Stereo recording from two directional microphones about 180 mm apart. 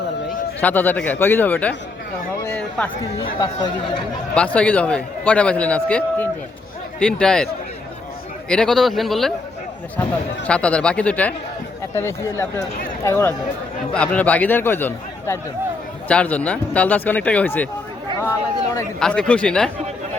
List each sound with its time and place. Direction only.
0.6 s a man's voice: 10° left (ahead or behind)
3.3 s speech: 25° left (ahead or behind)
4.4 s a man's voice: 5° left (ahead or behind)
18.9 s a man's voice: 5° left (ahead or behind)